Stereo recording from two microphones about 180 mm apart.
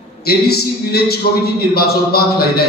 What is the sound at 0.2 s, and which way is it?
A man's voice, 60° left (ahead or behind).